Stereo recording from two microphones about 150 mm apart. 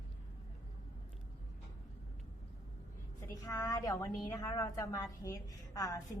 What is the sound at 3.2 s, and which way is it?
A woman's voice, 20° left (ahead or behind).